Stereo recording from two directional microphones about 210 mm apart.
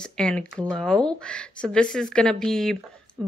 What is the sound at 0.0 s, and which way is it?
Speech, 5° left (ahead or behind).